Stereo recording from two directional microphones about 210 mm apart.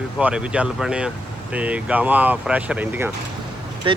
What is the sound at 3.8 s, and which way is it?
Speech, 25° right (ahead or behind).